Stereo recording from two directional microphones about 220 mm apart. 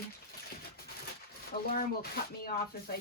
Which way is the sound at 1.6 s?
45° left (ahead or behind).